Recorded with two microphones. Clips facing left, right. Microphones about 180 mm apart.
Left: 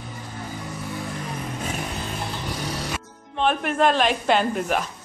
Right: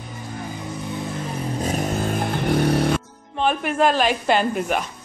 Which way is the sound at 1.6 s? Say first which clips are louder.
Right 10 dB; 40° right (ahead or behind).